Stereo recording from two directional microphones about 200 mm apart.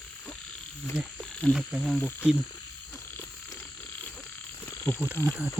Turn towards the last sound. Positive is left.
turn(degrees=-10)  # may be behind; listen again after turning